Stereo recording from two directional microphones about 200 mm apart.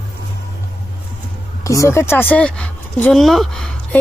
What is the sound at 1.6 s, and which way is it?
Speech, 15° left (ahead or behind).